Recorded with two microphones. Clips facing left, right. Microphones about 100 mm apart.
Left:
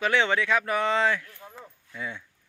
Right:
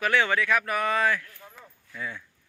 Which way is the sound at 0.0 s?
20° left (ahead or behind).